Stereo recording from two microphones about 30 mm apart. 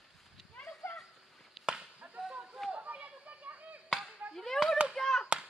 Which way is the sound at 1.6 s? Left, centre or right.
Centre.